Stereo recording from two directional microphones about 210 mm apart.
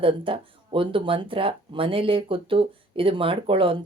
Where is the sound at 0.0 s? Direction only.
25° right (ahead or behind).